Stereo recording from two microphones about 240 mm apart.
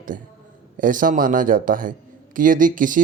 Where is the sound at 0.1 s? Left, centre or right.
Right.